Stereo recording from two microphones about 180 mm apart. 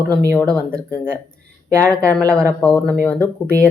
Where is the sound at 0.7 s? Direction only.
55° left (ahead or behind).